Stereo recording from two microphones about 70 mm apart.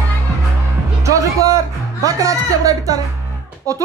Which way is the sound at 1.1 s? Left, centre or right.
Right.